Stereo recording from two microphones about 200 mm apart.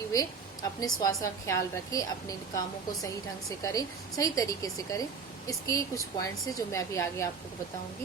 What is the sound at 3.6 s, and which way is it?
A woman's voice, 15° left (ahead or behind).